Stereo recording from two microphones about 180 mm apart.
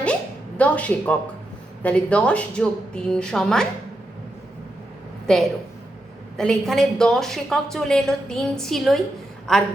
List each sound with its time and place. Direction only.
0.0 s a sound: 5° left (ahead or behind)
1.8 s a woman's voice: 5° left (ahead or behind)
5.3 s a woman's voice: 5° left (ahead or behind)